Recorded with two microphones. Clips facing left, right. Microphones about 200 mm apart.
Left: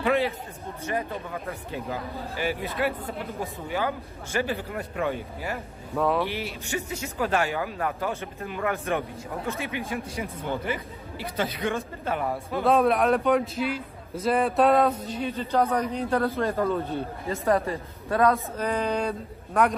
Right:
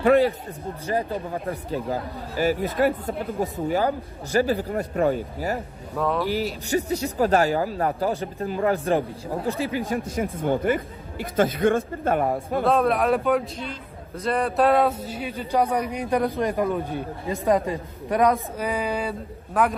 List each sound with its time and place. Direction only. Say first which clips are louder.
0.0 s speech: right 7 dB; 45° right (ahead or behind)
0.8 s speech: right 4 dB; 30° right (ahead or behind)
5.9 s speech: even; centre (ahead or behind)
6.3 s speech: right 7 dB; 35° right (ahead or behind)
10.1 s speech: right 7 dB; 50° right (ahead or behind)
12.6 s a man's voice: even; centre (ahead or behind)